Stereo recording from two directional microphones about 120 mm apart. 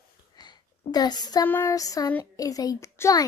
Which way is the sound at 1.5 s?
25° left (ahead or behind).